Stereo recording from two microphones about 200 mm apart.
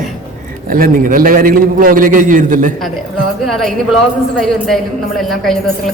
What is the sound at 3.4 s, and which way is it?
A woman's voice, centre (ahead or behind).